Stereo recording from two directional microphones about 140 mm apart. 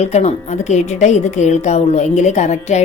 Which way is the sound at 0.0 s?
50° left (ahead or behind).